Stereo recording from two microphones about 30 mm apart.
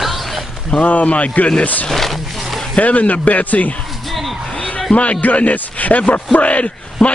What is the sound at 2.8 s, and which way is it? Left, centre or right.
Speech, left.